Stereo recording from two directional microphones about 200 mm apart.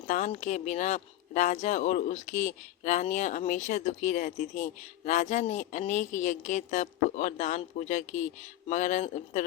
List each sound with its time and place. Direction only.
0.1 s speech: 35° left (ahead or behind)